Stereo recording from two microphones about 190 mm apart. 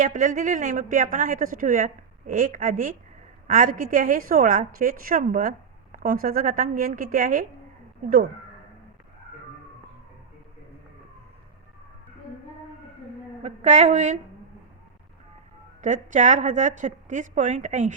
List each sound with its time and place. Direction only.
0.0 s a woman's voice: 45° right (ahead or behind)
13.4 s a woman's voice: 35° right (ahead or behind)
15.8 s a woman's voice: 40° right (ahead or behind)